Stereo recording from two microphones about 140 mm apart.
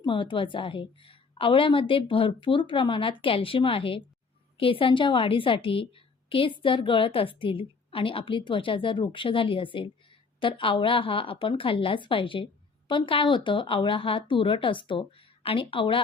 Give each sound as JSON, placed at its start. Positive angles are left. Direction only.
{"t": 0.0, "sound": "a woman's voice", "side_deg": 35}